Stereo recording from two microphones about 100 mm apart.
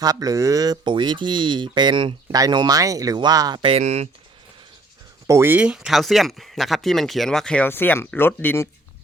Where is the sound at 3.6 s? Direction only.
80° right.